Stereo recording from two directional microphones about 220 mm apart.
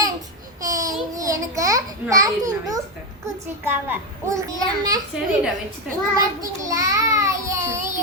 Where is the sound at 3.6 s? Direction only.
10° right (ahead or behind).